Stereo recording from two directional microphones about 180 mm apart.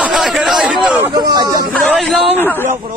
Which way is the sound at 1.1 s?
20° right (ahead or behind).